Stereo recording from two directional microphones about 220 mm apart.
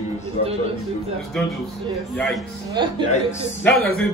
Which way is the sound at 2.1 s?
5° left (ahead or behind).